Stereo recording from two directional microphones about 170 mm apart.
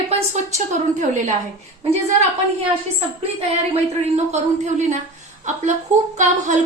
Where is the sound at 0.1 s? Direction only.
40° right (ahead or behind).